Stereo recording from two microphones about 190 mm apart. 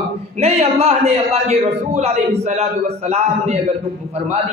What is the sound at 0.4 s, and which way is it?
A man's voice, 35° right (ahead or behind).